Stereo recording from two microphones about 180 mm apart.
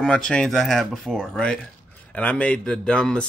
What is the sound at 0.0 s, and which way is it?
Speech, 5° left (ahead or behind).